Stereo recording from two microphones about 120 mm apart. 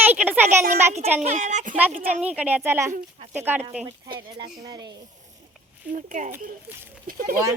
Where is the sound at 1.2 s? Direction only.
85° right.